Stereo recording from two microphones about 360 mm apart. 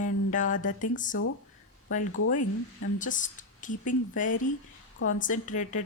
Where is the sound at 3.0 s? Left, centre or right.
Left.